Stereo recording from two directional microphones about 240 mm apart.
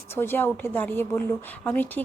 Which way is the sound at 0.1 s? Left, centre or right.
Centre.